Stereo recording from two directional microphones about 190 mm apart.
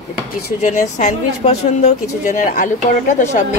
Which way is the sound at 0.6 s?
40° left (ahead or behind).